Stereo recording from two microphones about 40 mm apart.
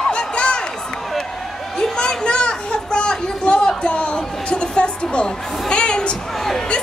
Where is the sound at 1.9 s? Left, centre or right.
Left.